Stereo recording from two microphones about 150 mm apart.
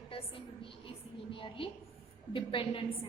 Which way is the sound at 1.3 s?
35° left (ahead or behind).